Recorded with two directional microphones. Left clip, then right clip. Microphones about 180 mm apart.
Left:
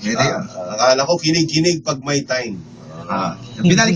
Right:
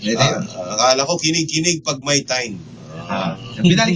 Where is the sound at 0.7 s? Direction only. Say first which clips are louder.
Left 1 dB; 50° left (ahead or behind).